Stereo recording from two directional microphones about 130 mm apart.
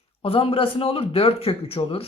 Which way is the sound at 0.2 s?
45° left (ahead or behind).